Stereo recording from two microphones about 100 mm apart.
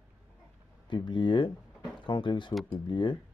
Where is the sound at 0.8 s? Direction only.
50° left (ahead or behind).